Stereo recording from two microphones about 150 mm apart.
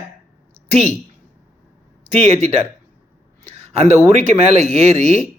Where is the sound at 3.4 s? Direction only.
45° right (ahead or behind).